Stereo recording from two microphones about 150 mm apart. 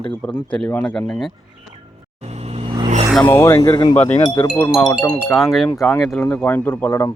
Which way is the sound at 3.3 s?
15° left (ahead or behind).